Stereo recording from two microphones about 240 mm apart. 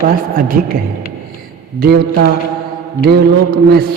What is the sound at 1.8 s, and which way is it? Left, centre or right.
A man's voice, right.